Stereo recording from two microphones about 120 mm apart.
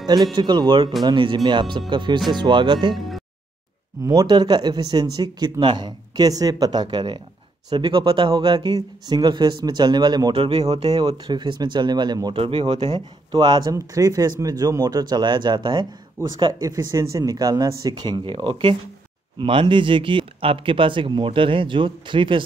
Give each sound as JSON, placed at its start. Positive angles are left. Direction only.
{"t": 0.0, "sound": "speech", "side_deg": -35}
{"t": 2.9, "sound": "music", "side_deg": 0}
{"t": 4.0, "sound": "speech", "side_deg": -30}
{"t": 10.9, "sound": "speech", "side_deg": -35}
{"t": 12.4, "sound": "speech", "side_deg": -45}